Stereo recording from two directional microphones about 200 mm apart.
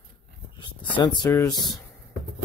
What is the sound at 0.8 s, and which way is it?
Speech, 25° left (ahead or behind).